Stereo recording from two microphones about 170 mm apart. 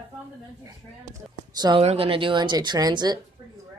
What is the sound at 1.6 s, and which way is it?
Speech, 25° right (ahead or behind).